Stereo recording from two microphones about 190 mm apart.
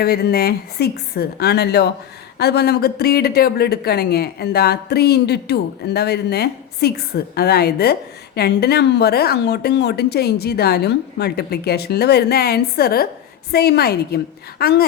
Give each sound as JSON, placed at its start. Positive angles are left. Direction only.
{"t": 0.0, "sound": "speech", "side_deg": 55}